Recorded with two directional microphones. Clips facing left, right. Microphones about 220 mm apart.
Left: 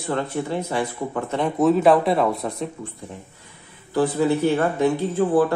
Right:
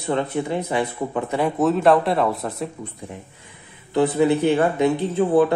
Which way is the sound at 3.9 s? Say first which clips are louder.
Right 2 dB; 20° right (ahead or behind).